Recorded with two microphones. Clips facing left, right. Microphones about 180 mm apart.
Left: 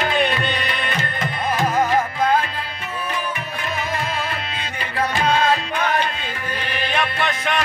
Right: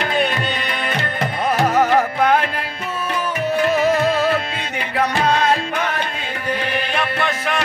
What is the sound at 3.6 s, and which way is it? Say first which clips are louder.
Music: right 10 dB; 75° right (ahead or behind).